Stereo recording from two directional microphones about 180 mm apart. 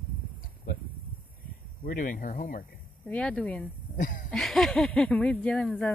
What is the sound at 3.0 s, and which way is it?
Speech, 10° left (ahead or behind).